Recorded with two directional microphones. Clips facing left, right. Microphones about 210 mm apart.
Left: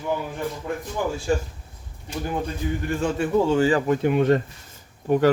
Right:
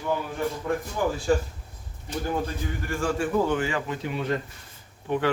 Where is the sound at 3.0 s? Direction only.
25° left (ahead or behind).